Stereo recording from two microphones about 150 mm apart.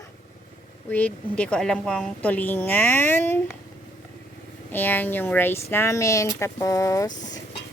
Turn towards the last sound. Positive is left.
turn(degrees=20)  # may be behind; listen again after turning